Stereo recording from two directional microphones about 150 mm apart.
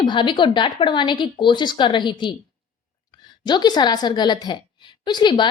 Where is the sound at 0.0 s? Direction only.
30° left (ahead or behind).